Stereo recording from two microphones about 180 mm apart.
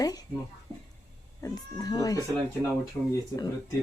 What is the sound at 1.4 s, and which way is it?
Speech, 20° left (ahead or behind).